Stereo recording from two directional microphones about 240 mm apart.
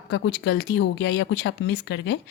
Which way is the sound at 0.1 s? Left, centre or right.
Left.